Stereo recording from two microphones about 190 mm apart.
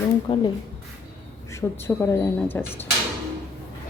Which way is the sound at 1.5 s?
15° left (ahead or behind).